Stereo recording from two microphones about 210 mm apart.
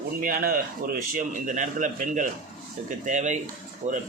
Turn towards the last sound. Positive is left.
turn(degrees=-35)  # may be behind; listen again after turning